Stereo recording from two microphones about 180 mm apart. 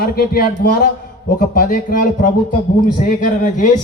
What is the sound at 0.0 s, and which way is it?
A man's voice, 55° left (ahead or behind).